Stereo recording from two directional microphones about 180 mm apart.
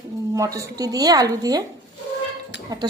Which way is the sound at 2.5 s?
75° left (ahead or behind).